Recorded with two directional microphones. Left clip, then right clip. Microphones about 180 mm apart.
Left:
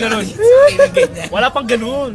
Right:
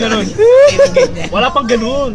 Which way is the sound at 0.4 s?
40° right (ahead or behind).